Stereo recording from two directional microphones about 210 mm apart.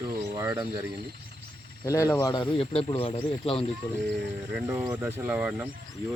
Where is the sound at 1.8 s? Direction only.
15° left (ahead or behind).